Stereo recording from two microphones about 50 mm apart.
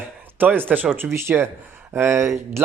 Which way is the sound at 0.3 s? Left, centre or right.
Right.